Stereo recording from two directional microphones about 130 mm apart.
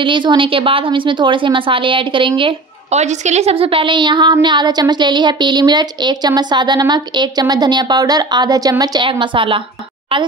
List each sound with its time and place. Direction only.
0.0 s a woman's voice: 40° right (ahead or behind)
2.9 s a woman's voice: 60° right (ahead or behind); by 9.6 s 40° right (ahead or behind)